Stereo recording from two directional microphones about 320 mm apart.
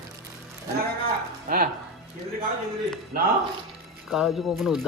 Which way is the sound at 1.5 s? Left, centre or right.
Right.